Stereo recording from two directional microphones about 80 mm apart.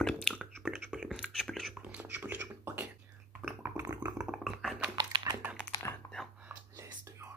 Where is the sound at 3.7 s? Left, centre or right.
Right.